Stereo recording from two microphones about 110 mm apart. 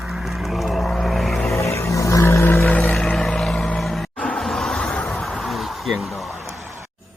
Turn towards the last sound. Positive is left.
turn(degrees=0)  # may be behind; listen again after turning